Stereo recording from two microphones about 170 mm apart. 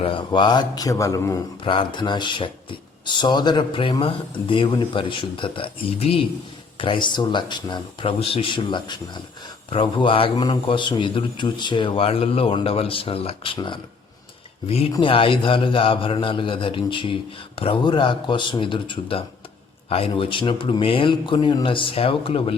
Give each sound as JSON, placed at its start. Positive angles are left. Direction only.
{"t": 0.0, "sound": "speech", "side_deg": 30}
{"t": 1.6, "sound": "speech", "side_deg": 30}
{"t": 14.9, "sound": "speech", "side_deg": 30}